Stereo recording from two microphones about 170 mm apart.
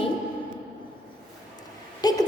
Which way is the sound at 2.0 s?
25° left (ahead or behind).